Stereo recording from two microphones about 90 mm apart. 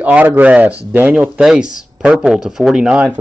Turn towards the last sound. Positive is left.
turn(degrees=-15)  # may be behind; listen again after turning